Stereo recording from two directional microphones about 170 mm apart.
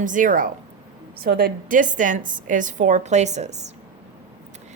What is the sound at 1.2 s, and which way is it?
A woman's voice, 60° right (ahead or behind).